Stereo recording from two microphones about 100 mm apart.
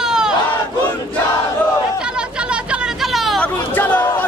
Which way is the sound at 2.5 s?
5° right (ahead or behind).